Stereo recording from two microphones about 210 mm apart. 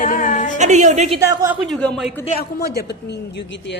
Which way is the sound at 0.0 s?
40° left (ahead or behind).